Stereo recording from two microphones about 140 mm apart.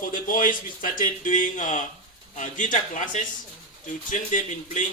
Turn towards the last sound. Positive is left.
turn(degrees=65)  # may be behind; listen again after turning